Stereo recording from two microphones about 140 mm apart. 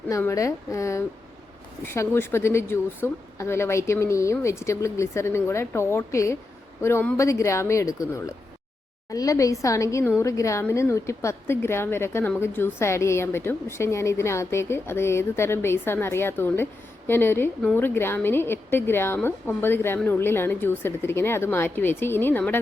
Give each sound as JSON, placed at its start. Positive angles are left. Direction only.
{"t": 0.1, "sound": "a woman's voice", "side_deg": 20}